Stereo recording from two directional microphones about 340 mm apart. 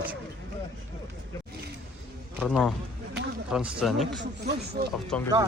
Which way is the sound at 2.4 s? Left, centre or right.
Centre.